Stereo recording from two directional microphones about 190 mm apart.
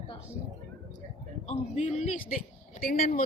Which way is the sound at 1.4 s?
35° left (ahead or behind).